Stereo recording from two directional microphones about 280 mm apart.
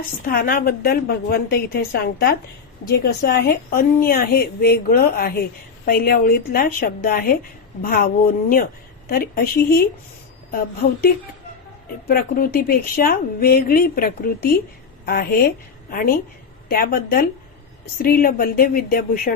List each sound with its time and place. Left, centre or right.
0.3 s a woman's voice: left
12.0 s a woman's voice: left